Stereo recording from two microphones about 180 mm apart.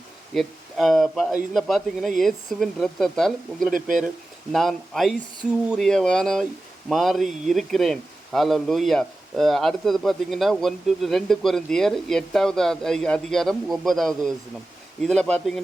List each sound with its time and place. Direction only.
0.3 s speech: centre (ahead or behind)
3.7 s speech: 50° right (ahead or behind)
4.5 s speech: centre (ahead or behind)